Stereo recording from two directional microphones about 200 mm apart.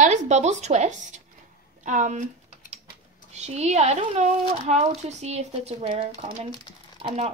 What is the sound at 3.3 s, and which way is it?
Speech, 35° right (ahead or behind).